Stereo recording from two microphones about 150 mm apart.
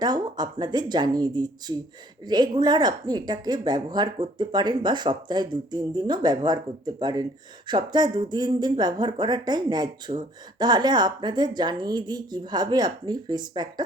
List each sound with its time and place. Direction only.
0.0 s speech: 30° right (ahead or behind)